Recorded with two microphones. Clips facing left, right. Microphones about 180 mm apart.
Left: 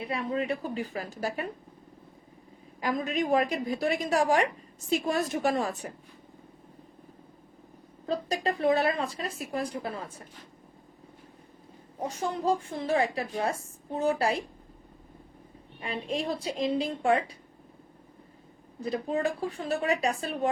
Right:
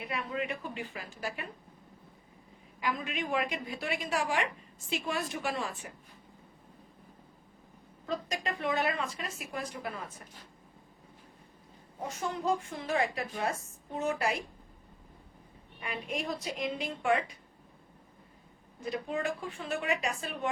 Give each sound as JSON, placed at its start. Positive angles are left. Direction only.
{"t": 0.0, "sound": "a woman's voice", "side_deg": 30}
{"t": 2.8, "sound": "a woman's voice", "side_deg": 40}
{"t": 8.0, "sound": "a woman's voice", "side_deg": 35}
{"t": 12.0, "sound": "a woman's voice", "side_deg": 35}
{"t": 15.8, "sound": "a woman's voice", "side_deg": 30}
{"t": 18.8, "sound": "a woman's voice", "side_deg": 35}